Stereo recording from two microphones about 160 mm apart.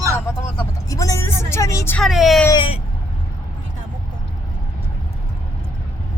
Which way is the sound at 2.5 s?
35° left (ahead or behind).